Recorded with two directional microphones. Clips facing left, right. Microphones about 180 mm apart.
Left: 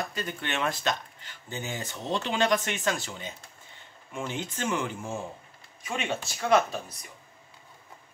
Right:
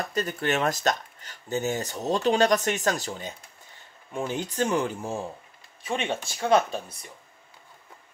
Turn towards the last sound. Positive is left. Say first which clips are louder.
# right 1 dB
turn(degrees=-30)  # may be behind; listen again after turning